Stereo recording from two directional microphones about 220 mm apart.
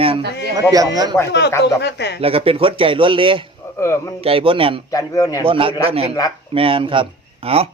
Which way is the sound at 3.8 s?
15° left (ahead or behind).